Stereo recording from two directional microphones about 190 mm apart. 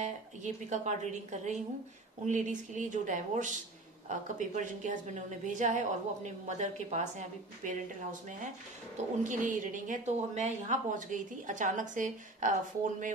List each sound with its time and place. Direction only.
0.0 s speech: 40° right (ahead or behind)
2.2 s a woman's voice: 40° right (ahead or behind)